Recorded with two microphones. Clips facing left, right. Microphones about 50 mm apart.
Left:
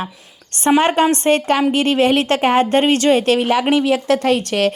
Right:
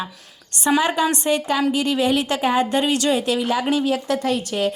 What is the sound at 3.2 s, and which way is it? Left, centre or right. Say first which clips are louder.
Speech: left 5 dB; left.